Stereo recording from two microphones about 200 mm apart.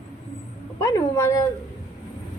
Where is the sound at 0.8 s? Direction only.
15° left (ahead or behind).